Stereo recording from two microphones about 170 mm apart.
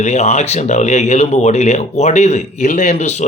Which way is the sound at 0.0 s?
45° left (ahead or behind).